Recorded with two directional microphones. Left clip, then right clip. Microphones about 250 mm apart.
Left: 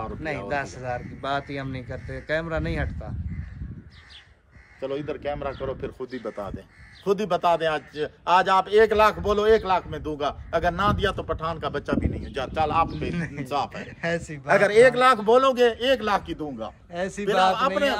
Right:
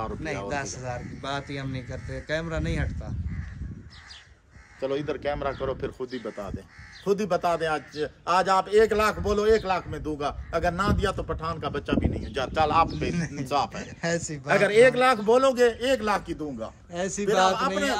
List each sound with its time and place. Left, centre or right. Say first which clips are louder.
0.0 s speech: left 1 dB; centre
4.7 s speech: right 1 dB; centre
7.1 s a man's voice: left 3 dB; left
12.1 s speech: right 1 dB; centre
14.4 s a man's voice: left 2 dB; centre
16.9 s speech: even; centre
17.6 s a man's voice: left 3 dB; left